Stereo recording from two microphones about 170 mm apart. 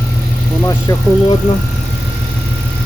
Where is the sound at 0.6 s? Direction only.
20° left (ahead or behind).